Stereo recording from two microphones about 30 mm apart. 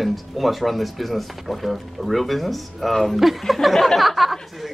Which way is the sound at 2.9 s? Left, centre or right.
Centre.